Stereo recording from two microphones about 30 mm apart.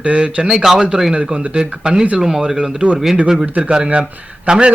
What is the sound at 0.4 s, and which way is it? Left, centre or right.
Speech, centre.